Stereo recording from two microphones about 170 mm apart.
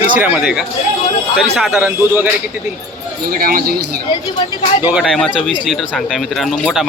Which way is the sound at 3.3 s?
60° right (ahead or behind).